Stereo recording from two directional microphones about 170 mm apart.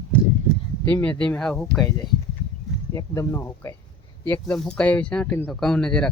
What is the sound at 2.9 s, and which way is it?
Speech, 20° left (ahead or behind).